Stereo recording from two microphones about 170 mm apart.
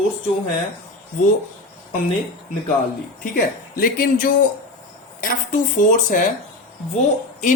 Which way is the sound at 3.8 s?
55° left (ahead or behind).